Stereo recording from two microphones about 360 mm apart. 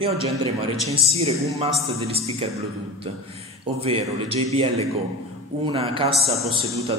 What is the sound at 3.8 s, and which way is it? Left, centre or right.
A man's voice, centre.